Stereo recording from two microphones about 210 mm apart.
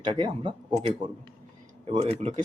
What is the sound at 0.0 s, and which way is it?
Speech, 20° right (ahead or behind).